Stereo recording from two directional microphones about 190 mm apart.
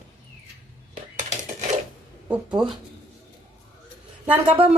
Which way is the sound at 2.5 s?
25° right (ahead or behind).